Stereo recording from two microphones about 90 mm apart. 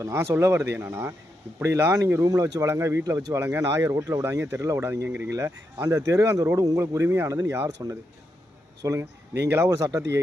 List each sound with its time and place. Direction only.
0.0 s speech: 30° right (ahead or behind)